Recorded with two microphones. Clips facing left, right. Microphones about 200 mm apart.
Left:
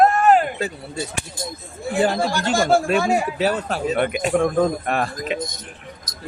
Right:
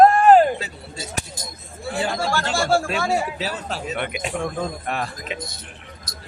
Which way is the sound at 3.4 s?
55° left (ahead or behind).